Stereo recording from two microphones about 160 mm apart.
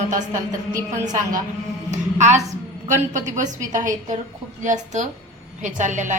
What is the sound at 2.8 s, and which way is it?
A woman's voice, 50° right (ahead or behind).